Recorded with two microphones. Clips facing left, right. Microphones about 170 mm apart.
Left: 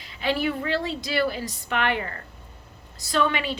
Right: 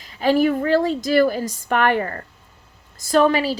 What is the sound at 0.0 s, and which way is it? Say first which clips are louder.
A woman's voice: right 8 dB; 40° right (ahead or behind).